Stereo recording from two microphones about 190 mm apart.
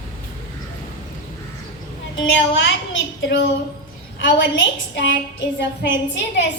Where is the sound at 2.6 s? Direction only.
90° left.